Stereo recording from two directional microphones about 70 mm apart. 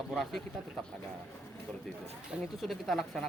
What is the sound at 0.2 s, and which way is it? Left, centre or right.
Speech, centre.